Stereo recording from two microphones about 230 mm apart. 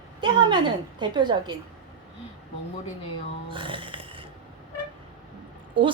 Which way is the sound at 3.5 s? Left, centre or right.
Right.